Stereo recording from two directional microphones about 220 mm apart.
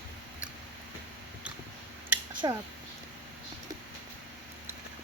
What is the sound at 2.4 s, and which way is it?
Speech, 20° right (ahead or behind).